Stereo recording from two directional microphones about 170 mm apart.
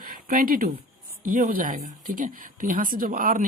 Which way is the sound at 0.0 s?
55° right (ahead or behind).